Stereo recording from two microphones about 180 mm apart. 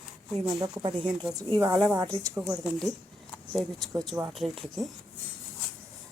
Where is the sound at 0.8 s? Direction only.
25° right (ahead or behind).